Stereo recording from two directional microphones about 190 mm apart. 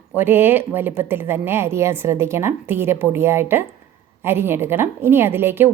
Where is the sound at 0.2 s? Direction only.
10° right (ahead or behind).